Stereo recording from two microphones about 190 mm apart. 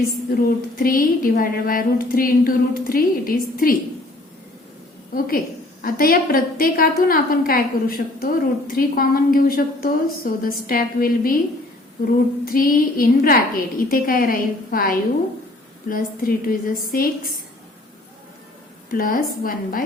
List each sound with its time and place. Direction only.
0.3 s a woman's voice: 50° left (ahead or behind)
5.8 s a woman's voice: 50° left (ahead or behind)
18.9 s a woman's voice: 50° left (ahead or behind)